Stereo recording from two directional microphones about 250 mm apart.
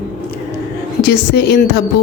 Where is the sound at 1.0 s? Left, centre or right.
Left.